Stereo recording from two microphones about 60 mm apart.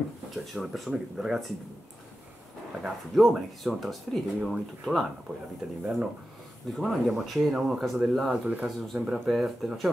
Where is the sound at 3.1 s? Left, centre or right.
Centre.